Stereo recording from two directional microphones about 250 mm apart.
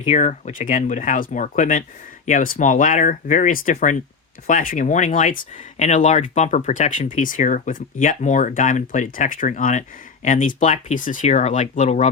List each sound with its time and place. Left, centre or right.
0.0 s speech: left